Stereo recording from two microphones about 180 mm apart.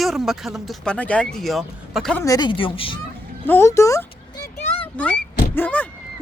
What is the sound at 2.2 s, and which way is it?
Speech, 25° left (ahead or behind).